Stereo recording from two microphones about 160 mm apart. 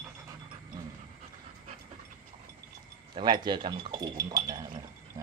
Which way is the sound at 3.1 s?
30° right (ahead or behind).